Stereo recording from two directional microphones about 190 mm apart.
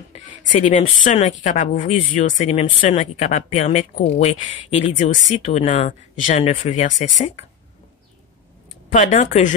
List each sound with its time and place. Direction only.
0.5 s speech: 40° left (ahead or behind)
8.9 s speech: 40° left (ahead or behind)